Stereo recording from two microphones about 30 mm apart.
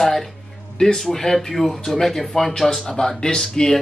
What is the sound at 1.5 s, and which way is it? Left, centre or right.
Speech, centre.